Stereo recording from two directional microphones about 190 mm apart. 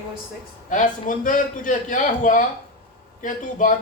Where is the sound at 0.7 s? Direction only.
45° left (ahead or behind).